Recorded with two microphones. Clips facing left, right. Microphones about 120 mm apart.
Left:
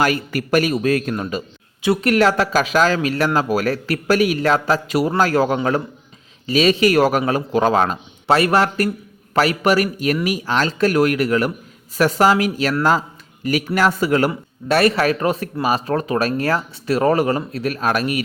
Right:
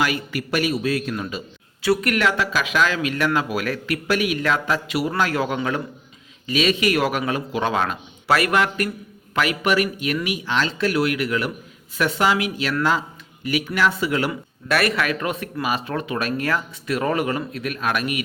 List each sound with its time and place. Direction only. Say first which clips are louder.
0.0 s a man's voice: left 4 dB; 45° left (ahead or behind)
1.8 s a man's voice: left 4 dB; 25° left (ahead or behind); by 14.3 s 45° left (ahead or behind)
14.7 s a man's voice: left 5 dB; 30° left (ahead or behind)